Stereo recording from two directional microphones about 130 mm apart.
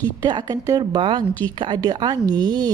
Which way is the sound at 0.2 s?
35° right (ahead or behind).